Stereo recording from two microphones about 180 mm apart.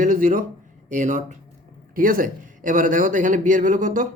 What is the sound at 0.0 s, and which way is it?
Speech, 45° right (ahead or behind).